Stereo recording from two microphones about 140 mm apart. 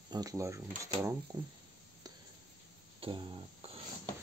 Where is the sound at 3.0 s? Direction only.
40° right (ahead or behind).